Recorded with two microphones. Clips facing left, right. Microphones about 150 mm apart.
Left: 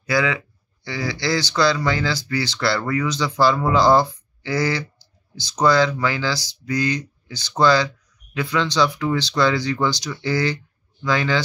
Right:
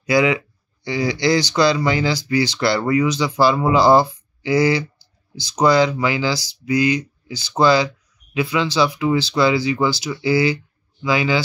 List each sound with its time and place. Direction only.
0.0 s speech: 15° right (ahead or behind)